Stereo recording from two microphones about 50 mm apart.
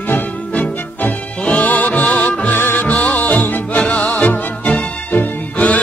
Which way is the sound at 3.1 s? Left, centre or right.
Left.